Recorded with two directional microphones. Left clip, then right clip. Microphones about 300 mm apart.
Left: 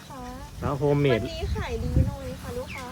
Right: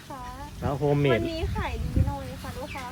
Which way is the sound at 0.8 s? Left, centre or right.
Left.